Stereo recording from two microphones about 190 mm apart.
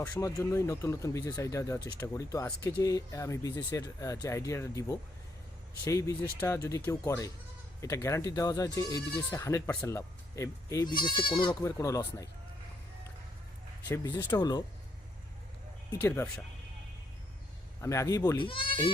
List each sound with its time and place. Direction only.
0.0 s speech: 15° left (ahead or behind)
13.8 s speech: 20° left (ahead or behind)
15.9 s speech: 15° left (ahead or behind)
17.7 s speech: 15° left (ahead or behind)